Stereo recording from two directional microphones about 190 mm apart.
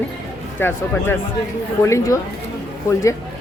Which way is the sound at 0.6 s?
10° left (ahead or behind).